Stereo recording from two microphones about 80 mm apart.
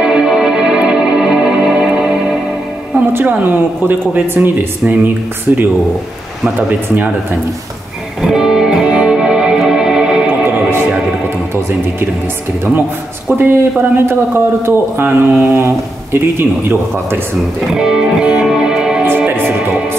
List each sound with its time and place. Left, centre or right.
0.0 s music: centre
3.1 s speech: right
8.2 s music: centre
10.4 s music: right
13.4 s speech: right
17.6 s music: centre
19.0 s music: right